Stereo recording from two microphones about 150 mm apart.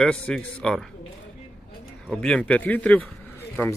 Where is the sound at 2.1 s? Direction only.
5° left (ahead or behind).